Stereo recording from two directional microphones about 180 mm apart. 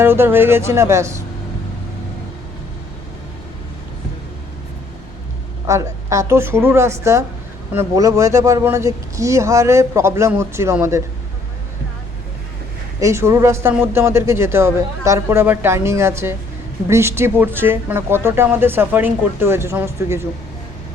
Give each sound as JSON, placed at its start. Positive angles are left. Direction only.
{"t": 0.0, "sound": "a man's voice", "side_deg": -15}
{"t": 5.6, "sound": "a man's voice", "side_deg": -15}
{"t": 13.0, "sound": "a man's voice", "side_deg": -15}